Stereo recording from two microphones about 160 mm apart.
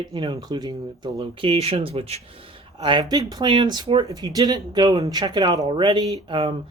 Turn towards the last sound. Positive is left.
turn(degrees=-35)  # may be behind; listen again after turning